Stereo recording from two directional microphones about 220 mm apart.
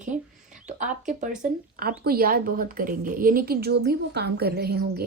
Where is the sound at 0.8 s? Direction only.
35° right (ahead or behind).